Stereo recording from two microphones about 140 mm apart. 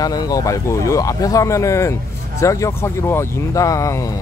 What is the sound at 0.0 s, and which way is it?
Speech, 25° left (ahead or behind).